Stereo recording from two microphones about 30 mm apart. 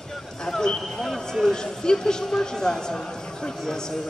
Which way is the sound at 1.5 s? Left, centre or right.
Left.